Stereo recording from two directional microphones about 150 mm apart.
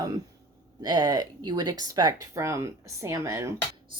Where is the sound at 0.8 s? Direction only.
25° right (ahead or behind).